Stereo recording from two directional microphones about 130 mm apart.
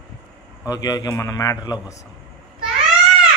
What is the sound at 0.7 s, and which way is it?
A man's voice, 30° left (ahead or behind).